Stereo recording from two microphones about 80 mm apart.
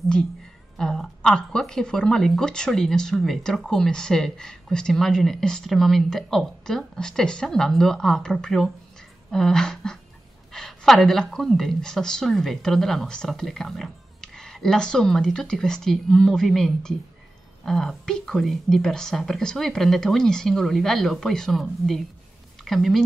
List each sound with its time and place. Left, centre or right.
0.7 s a woman's voice: centre